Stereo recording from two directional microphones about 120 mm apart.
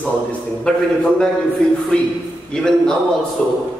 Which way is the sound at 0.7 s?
10° left (ahead or behind).